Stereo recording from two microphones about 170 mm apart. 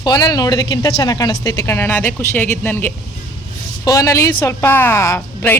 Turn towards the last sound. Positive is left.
turn(degrees=10)  # may be behind; listen again after turning